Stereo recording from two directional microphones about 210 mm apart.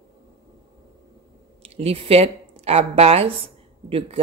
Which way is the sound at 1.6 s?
30° right (ahead or behind).